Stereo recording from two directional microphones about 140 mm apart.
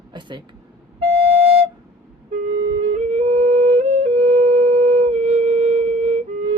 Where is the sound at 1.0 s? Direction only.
45° right (ahead or behind).